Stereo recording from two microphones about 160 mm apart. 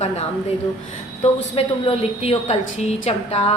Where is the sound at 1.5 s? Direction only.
35° left (ahead or behind).